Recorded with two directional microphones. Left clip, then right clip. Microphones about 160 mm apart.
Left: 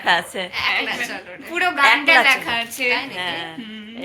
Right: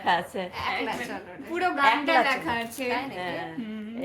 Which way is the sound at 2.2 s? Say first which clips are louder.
Left 9 dB; 40° right (ahead or behind).